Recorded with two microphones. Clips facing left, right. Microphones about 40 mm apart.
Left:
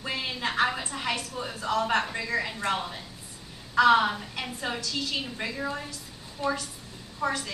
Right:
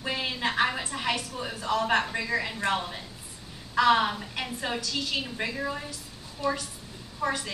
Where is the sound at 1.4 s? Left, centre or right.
Centre.